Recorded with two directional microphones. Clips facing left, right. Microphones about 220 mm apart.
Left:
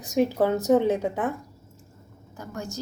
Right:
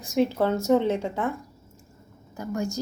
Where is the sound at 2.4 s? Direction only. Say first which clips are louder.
Right 6 dB; 10° right (ahead or behind).